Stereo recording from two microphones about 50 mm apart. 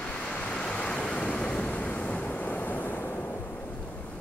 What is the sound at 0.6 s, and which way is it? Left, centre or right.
Waves, left.